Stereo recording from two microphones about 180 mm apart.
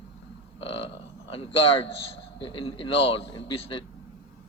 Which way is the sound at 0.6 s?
30° left (ahead or behind).